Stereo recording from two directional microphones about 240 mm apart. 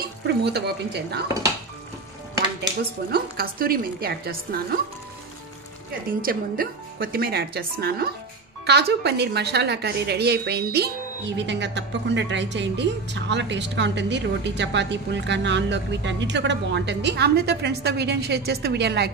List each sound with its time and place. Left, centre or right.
0.3 s a woman's voice: right
3.1 s speech: right
6.0 s a woman's voice: right